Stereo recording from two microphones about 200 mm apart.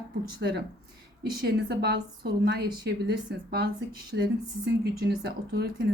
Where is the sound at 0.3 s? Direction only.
55° right (ahead or behind).